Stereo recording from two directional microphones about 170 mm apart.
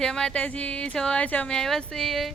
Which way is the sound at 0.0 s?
5° left (ahead or behind).